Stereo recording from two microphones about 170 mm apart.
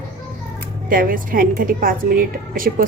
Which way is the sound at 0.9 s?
55° right (ahead or behind).